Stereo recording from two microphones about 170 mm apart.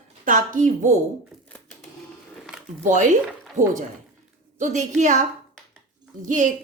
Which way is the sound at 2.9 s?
45° right (ahead or behind).